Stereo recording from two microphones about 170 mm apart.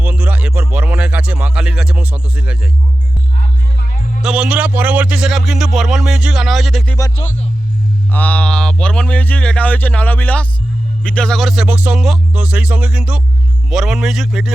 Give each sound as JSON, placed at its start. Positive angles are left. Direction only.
{"t": 0.0, "sound": "music", "side_deg": -10}
{"t": 3.3, "sound": "music", "side_deg": 55}
{"t": 4.2, "sound": "a man's voice", "side_deg": -5}
{"t": 8.1, "sound": "a man's voice", "side_deg": 10}